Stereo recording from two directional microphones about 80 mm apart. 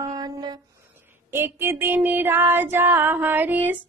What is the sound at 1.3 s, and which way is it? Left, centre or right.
Child singing, right.